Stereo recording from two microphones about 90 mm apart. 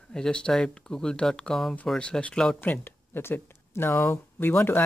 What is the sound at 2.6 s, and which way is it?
Speech, 20° left (ahead or behind).